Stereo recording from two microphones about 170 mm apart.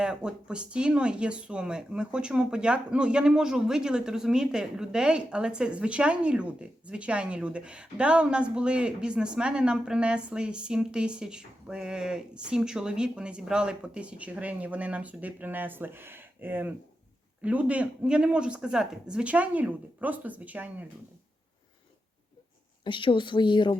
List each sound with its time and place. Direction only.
0.0 s speech: 5° right (ahead or behind)
22.8 s speech: 30° left (ahead or behind)